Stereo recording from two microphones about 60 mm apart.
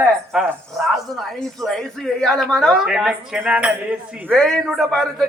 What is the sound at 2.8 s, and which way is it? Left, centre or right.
Speech, centre.